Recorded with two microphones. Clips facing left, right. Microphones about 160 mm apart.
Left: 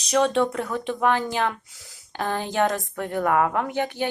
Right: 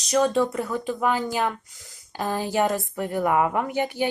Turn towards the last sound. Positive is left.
turn(degrees=-10)  # may be behind; listen again after turning